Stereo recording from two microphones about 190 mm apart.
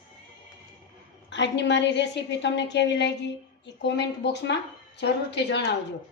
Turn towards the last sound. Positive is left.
turn(degrees=65)  # may be behind; listen again after turning